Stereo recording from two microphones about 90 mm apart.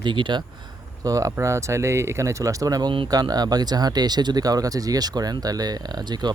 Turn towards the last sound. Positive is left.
turn(degrees=-50)  # may be behind; listen again after turning